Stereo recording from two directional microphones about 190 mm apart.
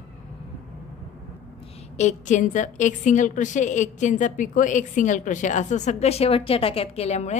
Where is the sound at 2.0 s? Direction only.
40° left (ahead or behind).